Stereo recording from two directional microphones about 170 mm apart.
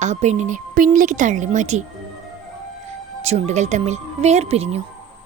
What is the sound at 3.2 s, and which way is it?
Speech, 40° right (ahead or behind).